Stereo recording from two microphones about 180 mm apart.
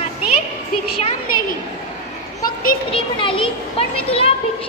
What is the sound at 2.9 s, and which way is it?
Children playing, 30° left (ahead or behind).